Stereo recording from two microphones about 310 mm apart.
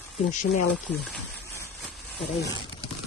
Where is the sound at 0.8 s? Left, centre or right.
Centre.